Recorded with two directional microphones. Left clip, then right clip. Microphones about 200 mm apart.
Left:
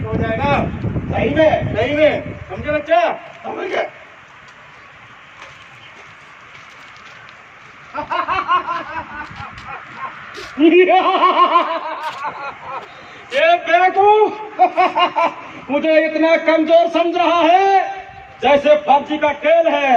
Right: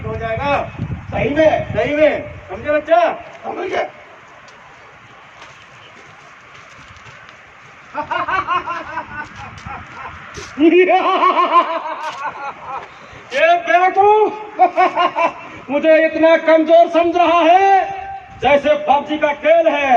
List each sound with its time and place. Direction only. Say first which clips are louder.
0.3 s a man's voice: even; 10° right (ahead or behind)
3.6 s a man's voice: even; 15° left (ahead or behind)
7.9 s a man's voice: even; 15° right (ahead or behind)
10.6 s a man's voice: left 1 dB; centre (ahead or behind)
14.6 s a man's voice: right 1 dB; 20° right (ahead or behind)